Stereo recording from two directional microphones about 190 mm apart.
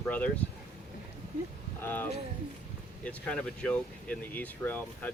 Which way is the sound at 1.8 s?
10° left (ahead or behind).